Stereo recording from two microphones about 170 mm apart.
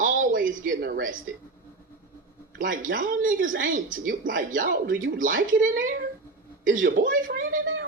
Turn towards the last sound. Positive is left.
turn(degrees=-55)  # may be behind; listen again after turning